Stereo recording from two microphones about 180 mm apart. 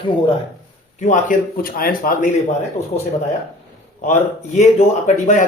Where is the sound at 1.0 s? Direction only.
45° left (ahead or behind).